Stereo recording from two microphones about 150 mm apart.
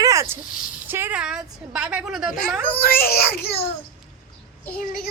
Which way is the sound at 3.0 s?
90° left.